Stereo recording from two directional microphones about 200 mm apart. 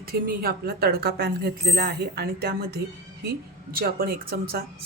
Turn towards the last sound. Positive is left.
turn(degrees=-50)  # may be behind; listen again after turning